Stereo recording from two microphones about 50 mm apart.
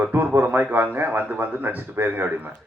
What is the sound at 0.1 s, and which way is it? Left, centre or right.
A man's voice, right.